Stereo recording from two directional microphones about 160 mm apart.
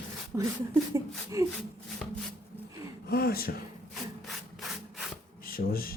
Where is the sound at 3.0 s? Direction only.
75° left (ahead or behind).